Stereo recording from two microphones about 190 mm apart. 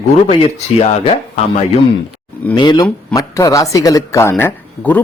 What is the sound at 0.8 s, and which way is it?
Speech, 35° left (ahead or behind).